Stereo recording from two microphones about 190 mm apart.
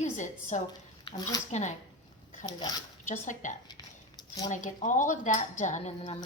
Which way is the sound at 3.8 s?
20° left (ahead or behind).